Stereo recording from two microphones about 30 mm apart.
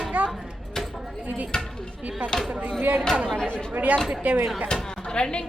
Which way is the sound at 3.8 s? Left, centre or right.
Right.